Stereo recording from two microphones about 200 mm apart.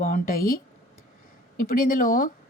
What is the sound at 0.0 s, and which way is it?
A woman's voice, 40° left (ahead or behind).